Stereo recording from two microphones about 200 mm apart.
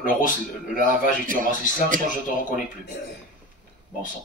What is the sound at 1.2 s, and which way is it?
Speech, 40° right (ahead or behind).